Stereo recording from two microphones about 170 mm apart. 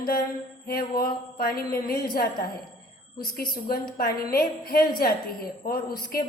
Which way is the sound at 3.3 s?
60° left (ahead or behind).